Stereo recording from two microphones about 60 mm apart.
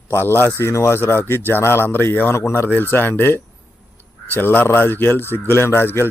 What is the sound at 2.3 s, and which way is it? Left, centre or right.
Speech, left.